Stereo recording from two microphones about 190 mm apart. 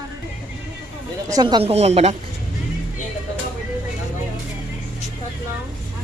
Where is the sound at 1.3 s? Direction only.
20° right (ahead or behind).